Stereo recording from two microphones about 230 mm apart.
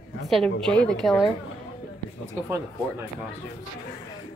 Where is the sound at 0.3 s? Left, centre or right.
Centre.